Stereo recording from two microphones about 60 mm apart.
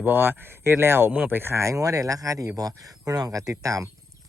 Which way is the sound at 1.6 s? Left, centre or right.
Right.